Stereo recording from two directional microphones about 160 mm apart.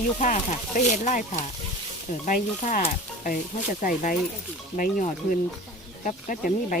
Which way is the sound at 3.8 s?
55° left (ahead or behind).